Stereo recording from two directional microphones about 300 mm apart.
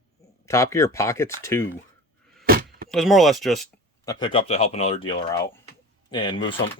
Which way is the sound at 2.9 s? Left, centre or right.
Centre.